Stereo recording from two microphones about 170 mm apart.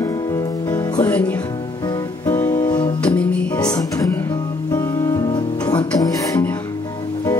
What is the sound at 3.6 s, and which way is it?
Music, 20° left (ahead or behind).